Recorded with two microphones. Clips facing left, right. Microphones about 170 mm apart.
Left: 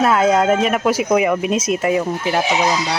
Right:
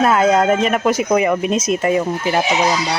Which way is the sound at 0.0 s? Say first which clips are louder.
Right 1 dB; centre (ahead or behind).